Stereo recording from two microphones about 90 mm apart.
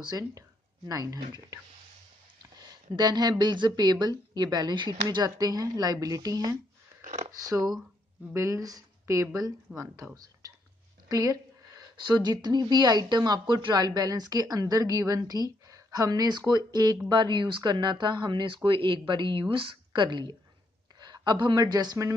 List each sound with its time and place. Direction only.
0.1 s a woman's voice: 45° right (ahead or behind)
3.0 s a woman's voice: 50° right (ahead or behind)
8.4 s speech: 35° right (ahead or behind)
9.7 s speech: 15° right (ahead or behind)
11.1 s speech: 40° right (ahead or behind)
12.0 s a woman's voice: 50° right (ahead or behind)